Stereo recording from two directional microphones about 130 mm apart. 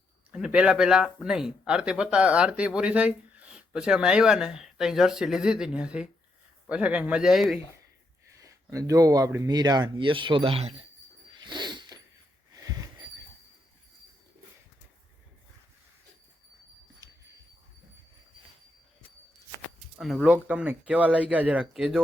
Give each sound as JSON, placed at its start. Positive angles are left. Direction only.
{"t": 0.3, "sound": "speech", "side_deg": -5}
{"t": 8.4, "sound": "speech", "side_deg": -25}
{"t": 11.3, "sound": "a sound", "side_deg": -35}
{"t": 17.0, "sound": "dog", "side_deg": -30}
{"t": 20.0, "sound": "speech", "side_deg": 0}
{"t": 20.3, "sound": "speech", "side_deg": -10}